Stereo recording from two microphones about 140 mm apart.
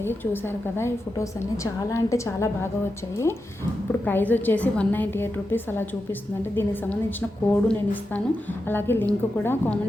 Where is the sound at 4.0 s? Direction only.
10° left (ahead or behind).